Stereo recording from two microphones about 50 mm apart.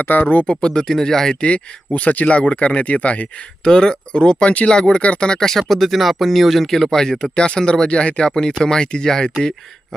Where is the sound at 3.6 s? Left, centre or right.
Centre.